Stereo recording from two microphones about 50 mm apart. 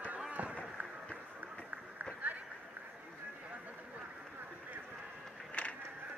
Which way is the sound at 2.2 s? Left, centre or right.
Right.